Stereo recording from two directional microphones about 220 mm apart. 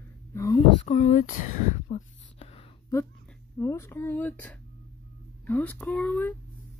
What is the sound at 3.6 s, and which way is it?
Speech, 15° left (ahead or behind).